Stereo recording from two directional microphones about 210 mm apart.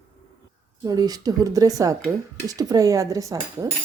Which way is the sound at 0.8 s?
15° right (ahead or behind).